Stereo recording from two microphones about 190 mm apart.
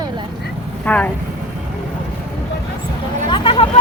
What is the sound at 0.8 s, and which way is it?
Speech, 10° left (ahead or behind).